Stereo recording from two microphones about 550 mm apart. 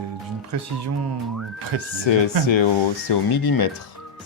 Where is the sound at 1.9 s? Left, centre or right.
Left.